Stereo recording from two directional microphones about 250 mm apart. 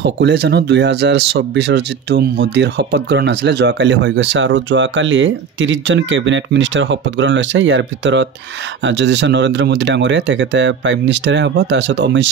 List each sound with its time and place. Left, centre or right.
0.0 s speech: right